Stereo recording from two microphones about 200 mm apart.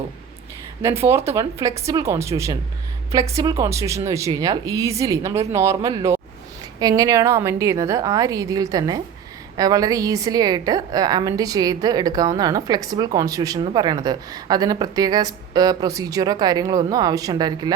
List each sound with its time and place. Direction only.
0.8 s a woman's voice: 15° right (ahead or behind)